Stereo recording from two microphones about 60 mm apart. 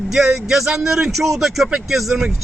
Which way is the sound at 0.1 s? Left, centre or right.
Centre.